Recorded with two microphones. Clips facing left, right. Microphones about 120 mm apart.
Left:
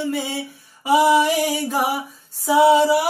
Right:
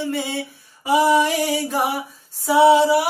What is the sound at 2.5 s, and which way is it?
Music, centre (ahead or behind).